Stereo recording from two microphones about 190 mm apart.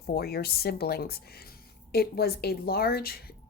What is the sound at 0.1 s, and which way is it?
Speech, 55° left (ahead or behind).